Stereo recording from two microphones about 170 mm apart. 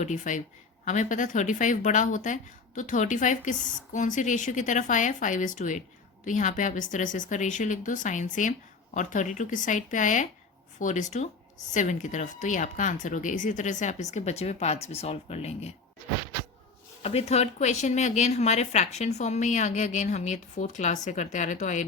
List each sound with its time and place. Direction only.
0.0 s speech: 45° left (ahead or behind)
17.0 s speech: 35° left (ahead or behind)